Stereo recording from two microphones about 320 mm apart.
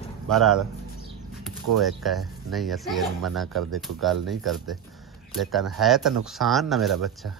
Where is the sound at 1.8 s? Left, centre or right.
Centre.